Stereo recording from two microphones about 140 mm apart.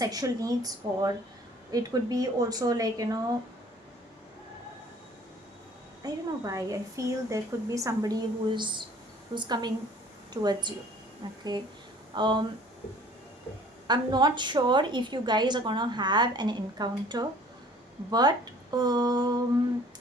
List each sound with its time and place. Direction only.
0.0 s a woman's voice: 25° right (ahead or behind)
6.0 s a woman's voice: 25° right (ahead or behind)
13.8 s a woman's voice: 30° right (ahead or behind)